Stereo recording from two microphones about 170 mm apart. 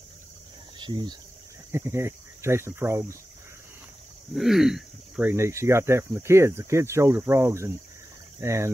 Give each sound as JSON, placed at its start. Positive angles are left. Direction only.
{"t": 0.7, "sound": "speech", "side_deg": -25}
{"t": 1.7, "sound": "speech", "side_deg": -15}
{"t": 4.4, "sound": "speech", "side_deg": 0}
{"t": 5.3, "sound": "speech", "side_deg": -15}